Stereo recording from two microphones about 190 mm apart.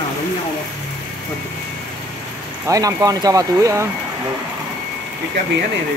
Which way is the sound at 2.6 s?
20° right (ahead or behind).